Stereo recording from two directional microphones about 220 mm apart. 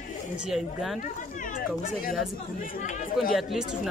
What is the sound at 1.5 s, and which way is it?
Speech, 40° left (ahead or behind).